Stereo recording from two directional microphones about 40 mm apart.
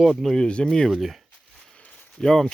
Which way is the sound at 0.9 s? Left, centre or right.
Centre.